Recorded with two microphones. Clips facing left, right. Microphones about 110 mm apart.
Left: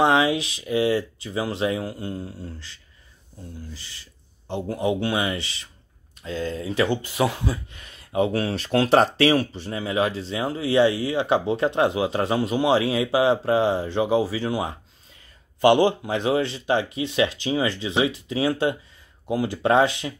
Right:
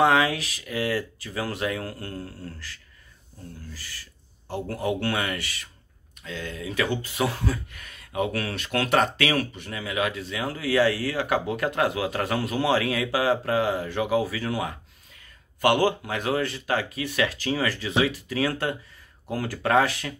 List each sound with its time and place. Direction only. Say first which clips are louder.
0.0 s speech: left 2 dB; 20° left (ahead or behind)